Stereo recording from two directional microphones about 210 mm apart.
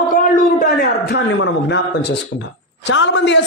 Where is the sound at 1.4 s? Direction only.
55° left (ahead or behind).